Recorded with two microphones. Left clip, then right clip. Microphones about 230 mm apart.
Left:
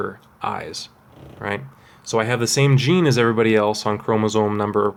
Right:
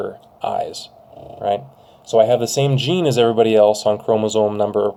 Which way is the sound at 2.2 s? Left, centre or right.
Left.